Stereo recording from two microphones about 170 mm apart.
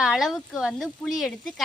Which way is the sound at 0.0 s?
Centre (ahead or behind).